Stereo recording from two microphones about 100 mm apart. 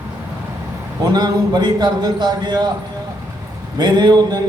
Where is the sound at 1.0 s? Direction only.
45° right (ahead or behind).